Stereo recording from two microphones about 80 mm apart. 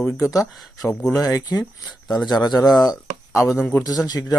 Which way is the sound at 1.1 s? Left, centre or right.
Left.